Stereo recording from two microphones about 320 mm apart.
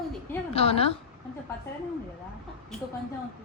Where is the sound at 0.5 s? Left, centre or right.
Centre.